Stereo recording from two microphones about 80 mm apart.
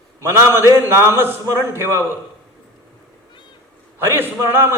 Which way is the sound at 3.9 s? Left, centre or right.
Right.